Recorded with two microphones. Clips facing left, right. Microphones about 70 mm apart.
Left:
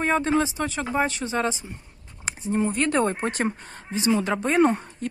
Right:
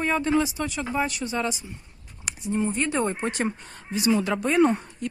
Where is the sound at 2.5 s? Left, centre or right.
Left.